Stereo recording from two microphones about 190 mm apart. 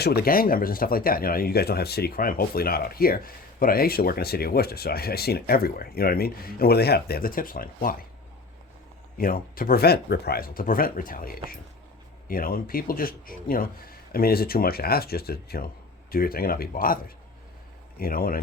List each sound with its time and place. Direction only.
0.0 s speech: 55° left (ahead or behind)
9.1 s speech: 50° left (ahead or behind)
18.0 s speech: 50° left (ahead or behind)